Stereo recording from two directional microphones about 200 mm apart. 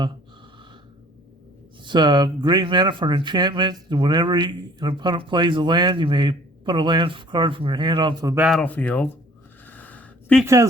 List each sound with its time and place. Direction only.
1.8 s speech: 20° right (ahead or behind)
8.4 s speech: 5° left (ahead or behind)
9.6 s a sound: 10° left (ahead or behind)
10.4 s speech: 15° right (ahead or behind)